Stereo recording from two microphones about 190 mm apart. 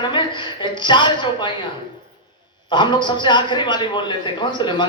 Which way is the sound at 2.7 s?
25° left (ahead or behind).